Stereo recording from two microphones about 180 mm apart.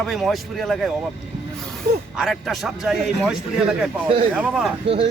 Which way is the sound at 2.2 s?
Centre (ahead or behind).